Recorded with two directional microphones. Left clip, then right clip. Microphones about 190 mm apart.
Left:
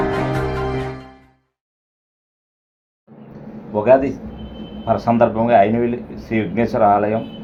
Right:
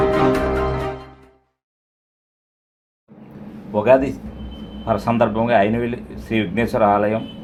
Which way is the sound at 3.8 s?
30° right (ahead or behind).